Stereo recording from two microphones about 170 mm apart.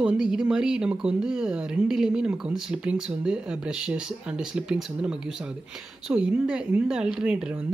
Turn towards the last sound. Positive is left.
turn(degrees=-5)  # may be behind; listen again after turning